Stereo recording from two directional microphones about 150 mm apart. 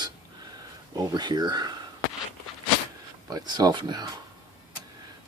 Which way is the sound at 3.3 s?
25° right (ahead or behind).